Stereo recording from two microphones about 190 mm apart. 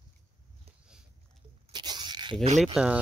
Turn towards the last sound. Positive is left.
turn(degrees=-5)  # may be behind; listen again after turning